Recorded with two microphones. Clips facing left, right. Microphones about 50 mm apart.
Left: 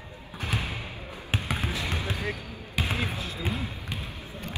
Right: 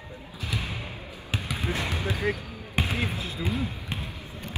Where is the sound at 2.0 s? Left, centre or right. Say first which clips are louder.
Right 4 dB; right.